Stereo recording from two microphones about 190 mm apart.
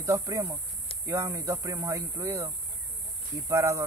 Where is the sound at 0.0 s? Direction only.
15° right (ahead or behind).